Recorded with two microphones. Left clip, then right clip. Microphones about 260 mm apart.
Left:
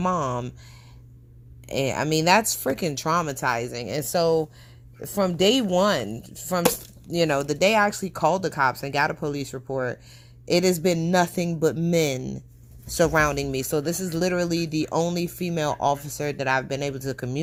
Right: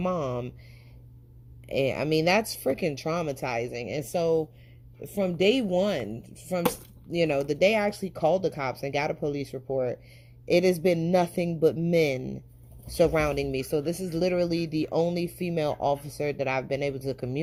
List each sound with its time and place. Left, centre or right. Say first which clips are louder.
1.6 s speech: left 1 dB; left